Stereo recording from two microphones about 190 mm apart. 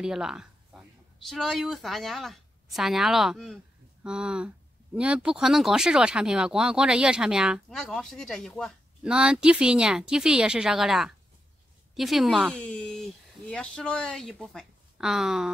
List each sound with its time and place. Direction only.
0.0 s speech: 5° right (ahead or behind)